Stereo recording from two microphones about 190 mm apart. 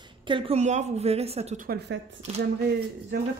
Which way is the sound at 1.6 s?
55° right (ahead or behind).